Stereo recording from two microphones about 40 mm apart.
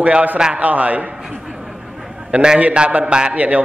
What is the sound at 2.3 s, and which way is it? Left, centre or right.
A man's voice, right.